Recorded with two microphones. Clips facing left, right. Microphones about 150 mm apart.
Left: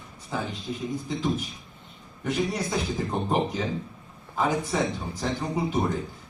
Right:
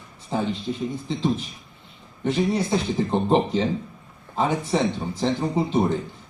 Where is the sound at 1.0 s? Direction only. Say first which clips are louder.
Right 4 dB; 25° right (ahead or behind).